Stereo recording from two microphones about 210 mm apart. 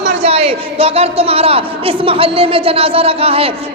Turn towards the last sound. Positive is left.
turn(degrees=-30)  # may be behind; listen again after turning